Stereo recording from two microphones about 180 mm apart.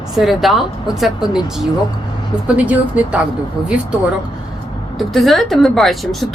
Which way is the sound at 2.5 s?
10° right (ahead or behind).